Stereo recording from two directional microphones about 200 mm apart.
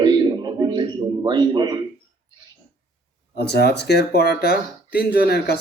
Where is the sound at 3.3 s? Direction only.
55° left (ahead or behind).